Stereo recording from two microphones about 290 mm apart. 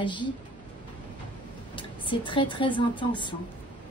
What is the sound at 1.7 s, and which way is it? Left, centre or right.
A woman's voice, centre.